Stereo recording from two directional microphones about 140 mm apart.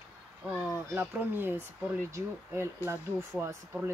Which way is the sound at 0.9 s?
15° right (ahead or behind).